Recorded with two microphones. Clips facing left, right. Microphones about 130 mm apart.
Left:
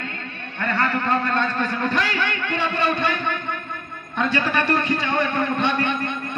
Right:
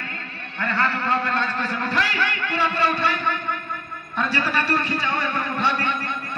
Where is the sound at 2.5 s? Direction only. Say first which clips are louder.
Even; 20° left (ahead or behind).